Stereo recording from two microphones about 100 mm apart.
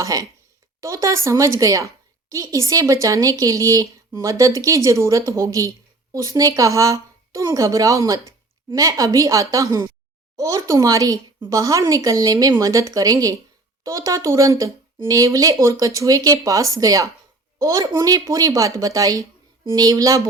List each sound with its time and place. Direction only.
0.0 s speech: 35° right (ahead or behind)